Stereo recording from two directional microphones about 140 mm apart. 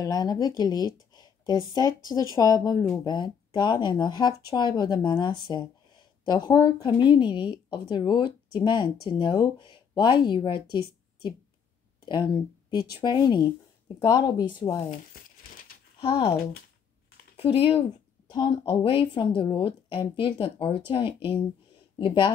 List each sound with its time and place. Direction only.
0.0 s speech: 25° left (ahead or behind)
1.1 s a sound: 30° left (ahead or behind)
2.3 s speech: 25° left (ahead or behind)
3.1 s speech: 35° left (ahead or behind)
14.9 s crumpling: 90° left
16.0 s speech: 45° left (ahead or behind)
17.6 s speech: 45° left (ahead or behind)
18.3 s speech: 30° left (ahead or behind)